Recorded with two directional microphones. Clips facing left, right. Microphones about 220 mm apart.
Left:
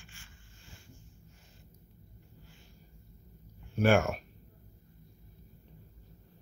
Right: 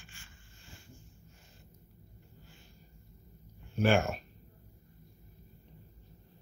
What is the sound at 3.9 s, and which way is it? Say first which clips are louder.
Speech: left 3 dB; 10° left (ahead or behind).